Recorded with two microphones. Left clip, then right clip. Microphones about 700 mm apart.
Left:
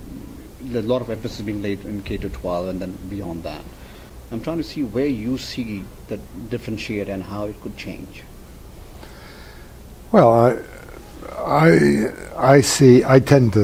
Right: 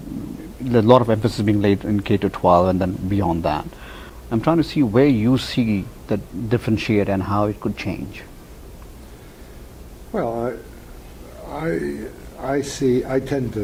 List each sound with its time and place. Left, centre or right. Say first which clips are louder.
0.7 s speech: right 8 dB; right
10.1 s speech: left 11 dB; left
11.5 s speech: left 10 dB; left